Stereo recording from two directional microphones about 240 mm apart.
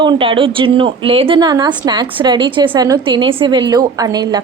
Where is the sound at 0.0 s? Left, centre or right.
Right.